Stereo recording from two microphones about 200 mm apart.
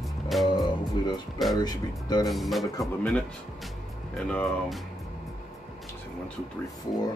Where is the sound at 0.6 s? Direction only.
20° left (ahead or behind).